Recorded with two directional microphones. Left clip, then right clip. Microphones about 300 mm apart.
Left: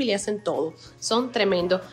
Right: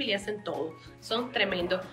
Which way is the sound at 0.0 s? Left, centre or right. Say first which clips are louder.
Left 6 dB; centre.